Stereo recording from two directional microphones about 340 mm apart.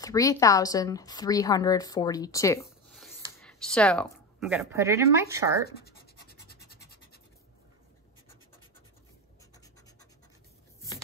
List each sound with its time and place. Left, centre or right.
0.0 s a woman's voice: centre
5.7 s a sound: left
6.7 s scratch: left